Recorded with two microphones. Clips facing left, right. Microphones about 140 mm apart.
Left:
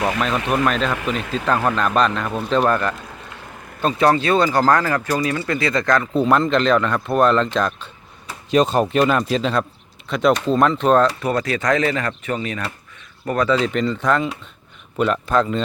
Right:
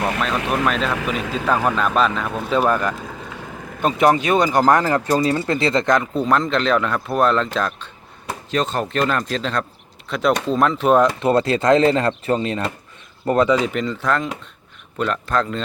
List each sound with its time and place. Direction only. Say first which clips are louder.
0.0 s speech: left 1 dB; centre (ahead or behind); by 6.1 s 20° right (ahead or behind)
6.1 s speech: left 2 dB; centre (ahead or behind)
8.4 s speech: left 6 dB; 15° left (ahead or behind); by 11.0 s 5° right (ahead or behind)
11.0 s speech: right 3 dB; 25° right (ahead or behind)
13.7 s speech: left 2 dB; centre (ahead or behind)